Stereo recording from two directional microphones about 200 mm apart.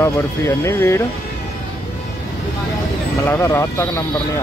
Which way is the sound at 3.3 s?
15° left (ahead or behind).